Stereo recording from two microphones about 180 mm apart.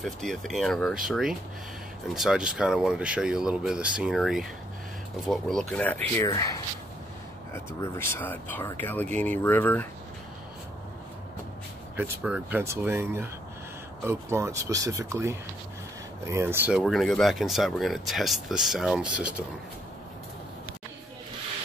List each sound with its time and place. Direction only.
0.0 s speech: centre (ahead or behind)
6.2 s speech: 20° left (ahead or behind)
12.0 s speech: 5° right (ahead or behind)
16.8 s speech: centre (ahead or behind)